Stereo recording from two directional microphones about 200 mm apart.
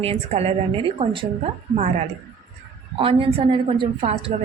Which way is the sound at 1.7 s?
35° right (ahead or behind).